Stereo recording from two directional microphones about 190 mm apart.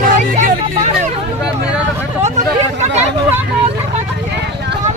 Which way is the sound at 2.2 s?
35° right (ahead or behind).